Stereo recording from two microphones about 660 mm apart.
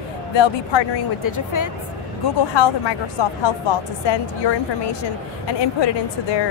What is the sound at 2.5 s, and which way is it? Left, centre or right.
Speech, left.